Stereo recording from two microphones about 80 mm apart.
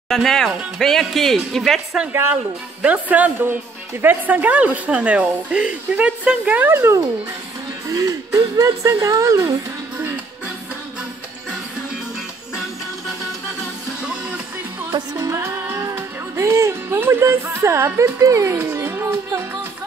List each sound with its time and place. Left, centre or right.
0.1 s speech: centre
2.8 s speech: centre
6.7 s speech: right
7.9 s speech: right
14.9 s music: right
17.2 s speech: right
18.6 s music: right